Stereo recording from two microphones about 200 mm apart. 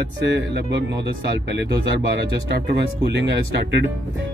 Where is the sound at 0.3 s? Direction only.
60° right (ahead or behind).